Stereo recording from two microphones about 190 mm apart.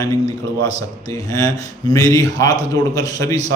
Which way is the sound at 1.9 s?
20° left (ahead or behind).